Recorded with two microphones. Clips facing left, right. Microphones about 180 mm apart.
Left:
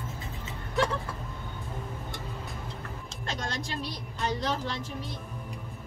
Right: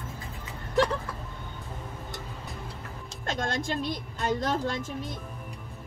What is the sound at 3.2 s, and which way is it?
Speech, 50° right (ahead or behind).